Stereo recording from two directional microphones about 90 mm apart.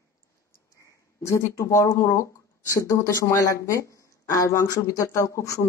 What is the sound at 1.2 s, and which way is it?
Speech, 30° left (ahead or behind).